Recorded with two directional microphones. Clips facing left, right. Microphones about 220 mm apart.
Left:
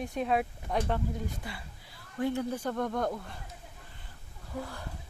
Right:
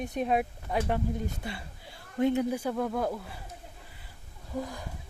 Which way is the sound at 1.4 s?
25° right (ahead or behind).